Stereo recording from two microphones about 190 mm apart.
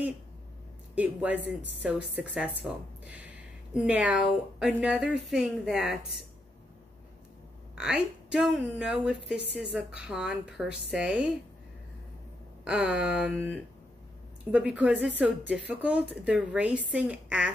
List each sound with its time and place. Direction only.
0.9 s a woman's voice: 10° right (ahead or behind)
7.7 s speech: 5° right (ahead or behind)
12.6 s speech: 5° right (ahead or behind)
14.5 s a woman's voice: 5° right (ahead or behind)